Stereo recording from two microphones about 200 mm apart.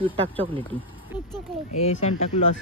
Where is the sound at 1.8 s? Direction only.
30° left (ahead or behind).